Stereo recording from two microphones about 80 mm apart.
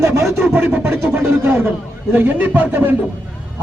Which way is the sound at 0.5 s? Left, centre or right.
Right.